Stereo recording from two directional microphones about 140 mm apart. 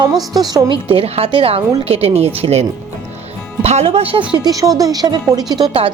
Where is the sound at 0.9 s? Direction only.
45° right (ahead or behind).